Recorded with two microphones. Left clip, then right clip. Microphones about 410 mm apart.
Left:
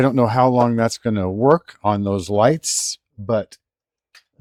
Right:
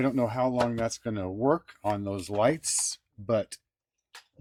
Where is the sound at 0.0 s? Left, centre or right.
Left.